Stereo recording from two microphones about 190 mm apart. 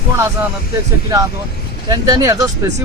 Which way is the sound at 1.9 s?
20° right (ahead or behind).